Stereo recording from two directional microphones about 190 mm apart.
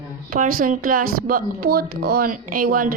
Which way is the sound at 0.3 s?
45° right (ahead or behind).